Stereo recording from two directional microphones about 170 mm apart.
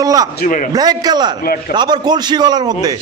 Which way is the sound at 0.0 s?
20° right (ahead or behind).